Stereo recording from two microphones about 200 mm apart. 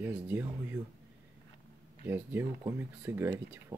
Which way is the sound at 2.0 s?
10° right (ahead or behind).